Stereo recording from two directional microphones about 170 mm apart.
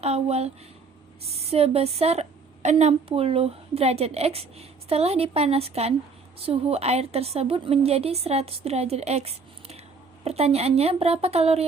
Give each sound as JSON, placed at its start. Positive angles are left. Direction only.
{"t": 0.0, "sound": "a woman's voice", "side_deg": -35}